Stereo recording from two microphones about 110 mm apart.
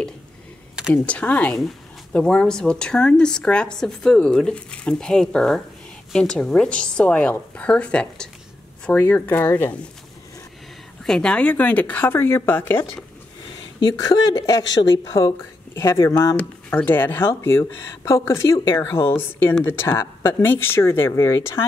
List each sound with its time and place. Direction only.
0.9 s speech: 15° left (ahead or behind)
11.1 s speech: 10° left (ahead or behind)
13.7 s speech: 35° left (ahead or behind)